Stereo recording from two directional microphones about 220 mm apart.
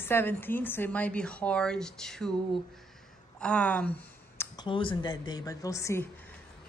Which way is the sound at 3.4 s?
5° left (ahead or behind).